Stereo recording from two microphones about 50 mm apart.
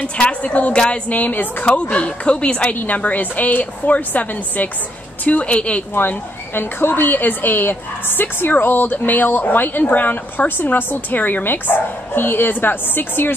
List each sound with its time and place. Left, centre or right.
0.0 s a woman's voice: left
5.9 s a woman's voice: left